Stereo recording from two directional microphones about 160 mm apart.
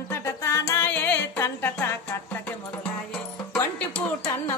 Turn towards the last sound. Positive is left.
turn(degrees=10)  # may be behind; listen again after turning